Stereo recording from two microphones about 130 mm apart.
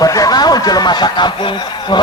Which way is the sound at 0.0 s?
25° left (ahead or behind).